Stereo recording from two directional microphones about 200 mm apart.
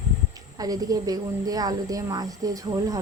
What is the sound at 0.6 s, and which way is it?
Speech, 20° right (ahead or behind).